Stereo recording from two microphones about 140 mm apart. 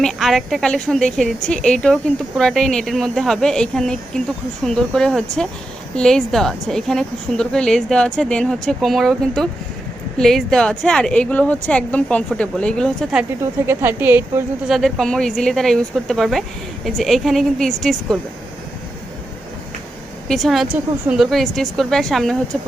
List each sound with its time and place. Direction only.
0.0 s a woman's voice: centre (ahead or behind)
13.4 s a woman's voice: 15° right (ahead or behind)
14.7 s a woman's voice: centre (ahead or behind)
20.2 s a woman's voice: centre (ahead or behind)